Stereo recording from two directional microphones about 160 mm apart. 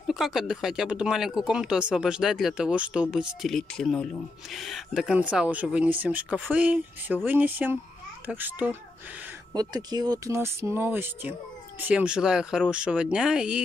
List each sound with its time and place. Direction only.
0.1 s speech: centre (ahead or behind)
9.5 s speech: 25° right (ahead or behind); by 13.6 s 5° right (ahead or behind)